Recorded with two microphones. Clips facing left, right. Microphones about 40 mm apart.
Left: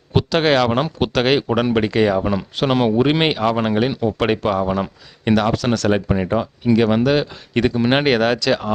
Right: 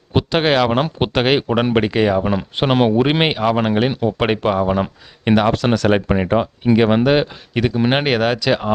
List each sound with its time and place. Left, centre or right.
0.1 s speech: centre
7.5 s speech: centre